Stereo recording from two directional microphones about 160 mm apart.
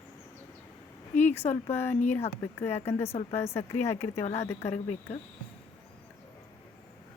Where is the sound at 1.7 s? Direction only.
15° left (ahead or behind).